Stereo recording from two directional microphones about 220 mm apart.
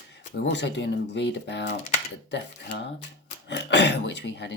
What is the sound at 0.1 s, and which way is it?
Speech, 50° left (ahead or behind).